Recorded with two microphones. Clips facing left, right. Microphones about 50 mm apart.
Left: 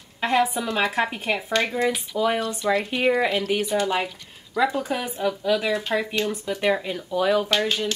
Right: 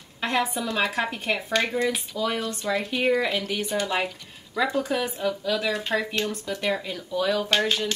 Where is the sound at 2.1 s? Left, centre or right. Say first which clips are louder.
Left 4 dB; centre.